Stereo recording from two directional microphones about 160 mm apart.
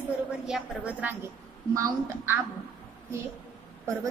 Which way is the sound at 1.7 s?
15° right (ahead or behind).